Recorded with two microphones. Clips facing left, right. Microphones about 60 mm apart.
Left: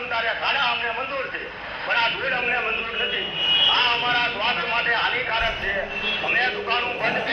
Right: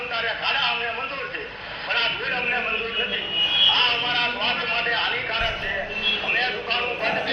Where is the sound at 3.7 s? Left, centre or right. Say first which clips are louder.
Left 3 dB; left.